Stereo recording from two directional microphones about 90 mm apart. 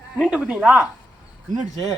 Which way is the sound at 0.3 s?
15° right (ahead or behind).